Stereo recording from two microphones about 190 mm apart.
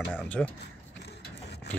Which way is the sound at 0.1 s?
5° left (ahead or behind).